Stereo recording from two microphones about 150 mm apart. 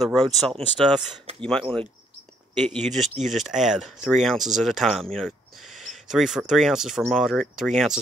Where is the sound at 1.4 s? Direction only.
5° left (ahead or behind).